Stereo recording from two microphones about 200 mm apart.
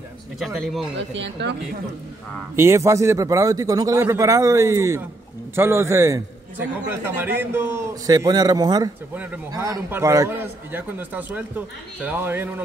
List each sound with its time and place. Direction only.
0.6 s speech: centre (ahead or behind)
0.9 s speech: 65° right (ahead or behind)
2.5 s a man's voice: 15° right (ahead or behind)
9.1 s a man's voice: 10° right (ahead or behind)